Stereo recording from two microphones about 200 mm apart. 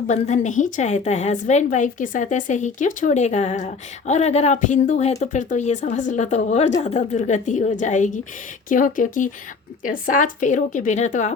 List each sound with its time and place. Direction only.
0.1 s a woman's voice: 35° left (ahead or behind)